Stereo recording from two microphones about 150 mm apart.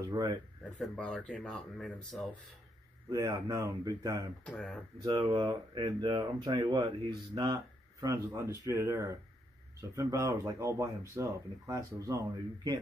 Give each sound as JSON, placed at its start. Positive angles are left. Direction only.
{"t": 0.7, "sound": "speech", "side_deg": 5}
{"t": 3.1, "sound": "speech", "side_deg": -25}
{"t": 4.5, "sound": "speech", "side_deg": 5}
{"t": 5.0, "sound": "speech", "side_deg": -30}